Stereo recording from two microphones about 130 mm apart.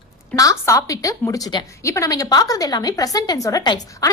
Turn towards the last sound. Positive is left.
turn(degrees=30)  # may be behind; listen again after turning